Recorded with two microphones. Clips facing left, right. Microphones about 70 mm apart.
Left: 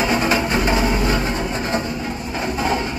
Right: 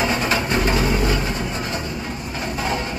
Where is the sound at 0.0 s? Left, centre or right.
Centre.